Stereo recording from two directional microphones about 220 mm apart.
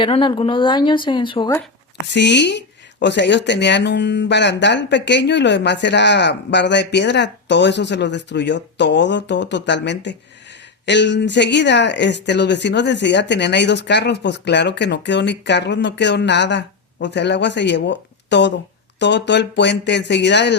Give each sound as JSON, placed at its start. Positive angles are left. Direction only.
{"t": 0.0, "sound": "speech", "side_deg": 20}
{"t": 2.1, "sound": "speech", "side_deg": 50}